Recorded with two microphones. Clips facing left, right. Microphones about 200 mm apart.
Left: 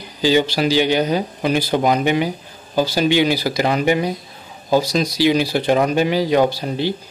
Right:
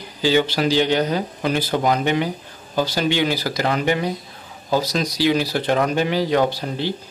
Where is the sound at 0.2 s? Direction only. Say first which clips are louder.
Left 2 dB; 15° left (ahead or behind).